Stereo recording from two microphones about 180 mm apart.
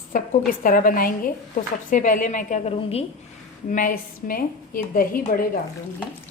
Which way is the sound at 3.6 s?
50° left (ahead or behind).